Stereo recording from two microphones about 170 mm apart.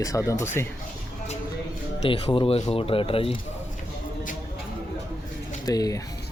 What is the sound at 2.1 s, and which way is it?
Speech, 30° left (ahead or behind).